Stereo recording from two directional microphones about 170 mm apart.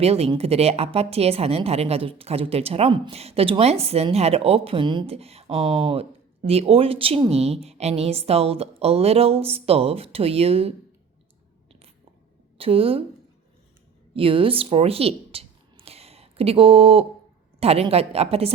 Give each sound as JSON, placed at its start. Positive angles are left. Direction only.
{"t": 0.0, "sound": "a woman's voice", "side_deg": -35}
{"t": 12.5, "sound": "a woman's voice", "side_deg": -35}
{"t": 14.1, "sound": "a woman's voice", "side_deg": -30}